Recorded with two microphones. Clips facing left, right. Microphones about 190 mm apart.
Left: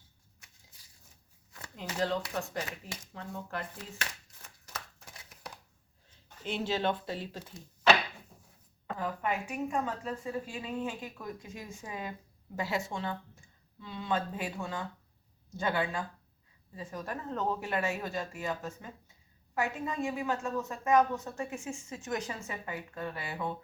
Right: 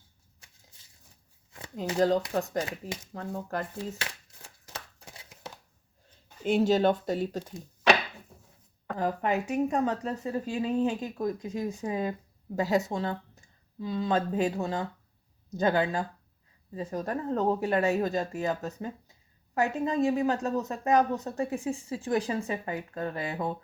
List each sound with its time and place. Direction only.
0.3 s a sound: 30° right (ahead or behind)
2.0 s speech: 40° right (ahead or behind)
4.4 s chopping: 30° right (ahead or behind)
6.4 s speech: 45° right (ahead or behind)
9.0 s speech: 35° right (ahead or behind)